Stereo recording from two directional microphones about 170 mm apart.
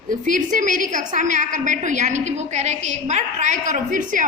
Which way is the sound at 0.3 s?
50° right (ahead or behind).